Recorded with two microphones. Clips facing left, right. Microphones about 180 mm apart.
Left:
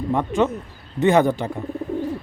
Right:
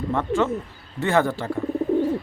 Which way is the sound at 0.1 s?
15° left (ahead or behind).